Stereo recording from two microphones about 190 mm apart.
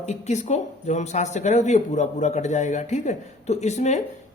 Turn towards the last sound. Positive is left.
turn(degrees=35)  # may be behind; listen again after turning